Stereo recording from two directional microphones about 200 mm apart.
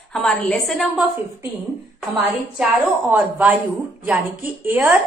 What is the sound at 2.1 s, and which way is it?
A woman's voice, 10° right (ahead or behind).